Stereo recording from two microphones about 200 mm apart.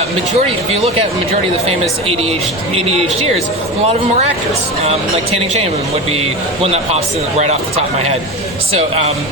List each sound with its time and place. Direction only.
0.3 s speech: 30° right (ahead or behind)
6.1 s speech: 30° right (ahead or behind)
8.7 s speech: 30° right (ahead or behind)